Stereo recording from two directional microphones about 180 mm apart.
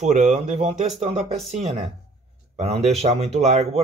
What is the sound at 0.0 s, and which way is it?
Speech, 40° right (ahead or behind).